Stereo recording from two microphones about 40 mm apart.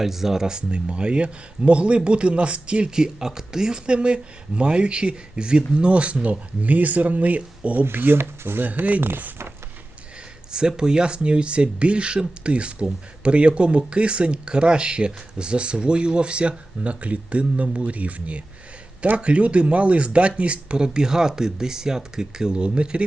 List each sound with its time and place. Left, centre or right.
0.0 s speech: centre; by 7.9 s right
7.9 s speech: right
8.6 s speech: right
9.0 s speech: right
10.5 s speech: centre